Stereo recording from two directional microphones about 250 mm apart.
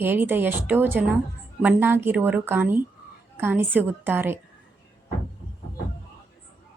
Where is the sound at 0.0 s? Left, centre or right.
Centre.